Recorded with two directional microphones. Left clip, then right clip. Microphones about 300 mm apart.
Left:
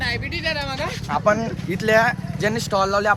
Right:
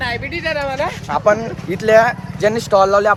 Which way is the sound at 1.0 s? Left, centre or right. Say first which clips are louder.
Right 4 dB; centre.